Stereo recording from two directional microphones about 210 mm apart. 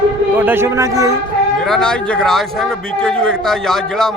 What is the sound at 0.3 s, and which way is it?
Speech, 10° right (ahead or behind).